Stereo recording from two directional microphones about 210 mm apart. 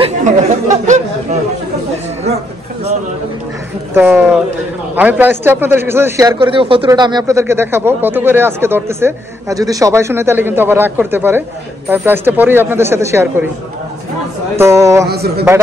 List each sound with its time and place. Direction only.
0.0 s chatter: 35° right (ahead or behind)
3.9 s a man's voice: 10° right (ahead or behind)
14.6 s a man's voice: 15° right (ahead or behind)
15.0 s a man's voice: 50° right (ahead or behind)